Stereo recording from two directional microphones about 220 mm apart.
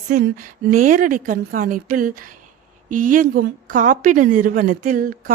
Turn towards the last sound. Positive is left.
turn(degrees=-35)  # may be behind; listen again after turning